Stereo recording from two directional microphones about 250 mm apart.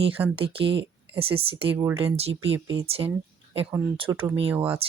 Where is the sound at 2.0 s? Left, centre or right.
Right.